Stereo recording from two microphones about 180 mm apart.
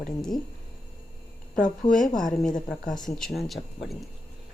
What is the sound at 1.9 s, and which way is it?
Speech, 50° left (ahead or behind).